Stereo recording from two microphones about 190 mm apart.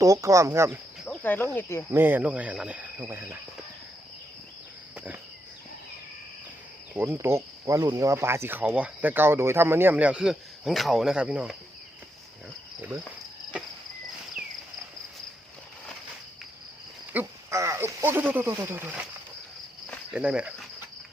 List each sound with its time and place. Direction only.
0.0 s speech: 15° right (ahead or behind)
1.0 s cricket: 5° left (ahead or behind)
1.9 s speech: 10° right (ahead or behind)
6.9 s speech: 10° right (ahead or behind)
17.1 s speech: 10° right (ahead or behind)
20.1 s speech: 5° right (ahead or behind)